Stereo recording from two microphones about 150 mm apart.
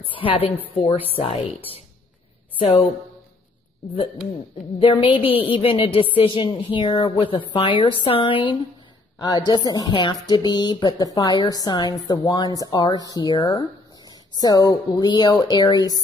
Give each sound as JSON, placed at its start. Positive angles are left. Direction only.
{"t": 0.0, "sound": "a woman's voice", "side_deg": 35}
{"t": 2.6, "sound": "a woman's voice", "side_deg": 45}
{"t": 4.7, "sound": "a woman's voice", "side_deg": 35}